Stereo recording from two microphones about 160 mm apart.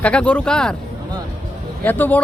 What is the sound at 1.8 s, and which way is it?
Speech, 10° left (ahead or behind).